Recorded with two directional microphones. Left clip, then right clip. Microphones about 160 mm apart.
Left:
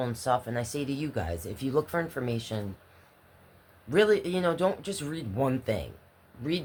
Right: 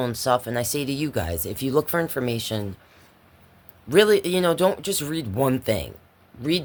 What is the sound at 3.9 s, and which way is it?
A woman's voice, 80° right.